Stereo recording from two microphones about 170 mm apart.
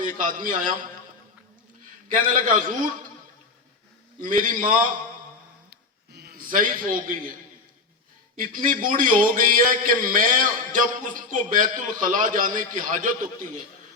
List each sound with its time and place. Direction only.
0.0 s a man's voice: 50° right (ahead or behind)
2.0 s a man's voice: 50° right (ahead or behind)
4.2 s a man's voice: 50° right (ahead or behind)
5.7 s a sound: 70° right (ahead or behind); by 7.3 s 55° right (ahead or behind)
8.4 s a man's voice: 50° right (ahead or behind)